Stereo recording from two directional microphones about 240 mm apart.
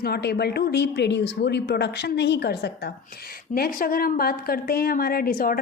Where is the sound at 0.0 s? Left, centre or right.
Left.